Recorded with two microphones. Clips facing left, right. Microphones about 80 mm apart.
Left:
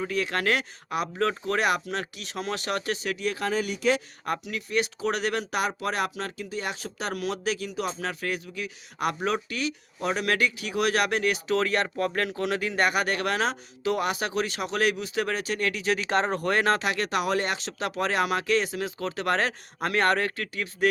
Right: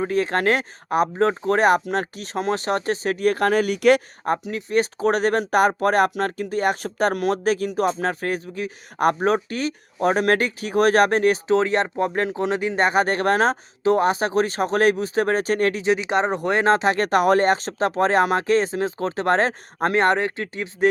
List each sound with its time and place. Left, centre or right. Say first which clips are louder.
0.0 s speech: right 7 dB; right
4.2 s speech: right 7 dB; right
15.8 s speech: right 5 dB; centre